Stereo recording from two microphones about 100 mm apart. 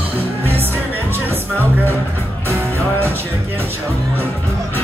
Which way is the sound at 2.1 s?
20° left (ahead or behind).